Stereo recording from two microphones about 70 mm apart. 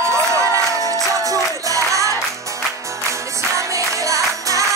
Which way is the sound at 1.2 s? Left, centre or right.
Right.